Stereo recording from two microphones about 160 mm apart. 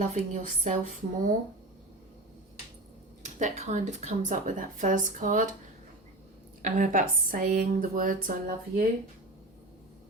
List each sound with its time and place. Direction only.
0.1 s speech: 50° right (ahead or behind)
3.2 s speech: 45° right (ahead or behind)
6.6 s speech: 50° right (ahead or behind)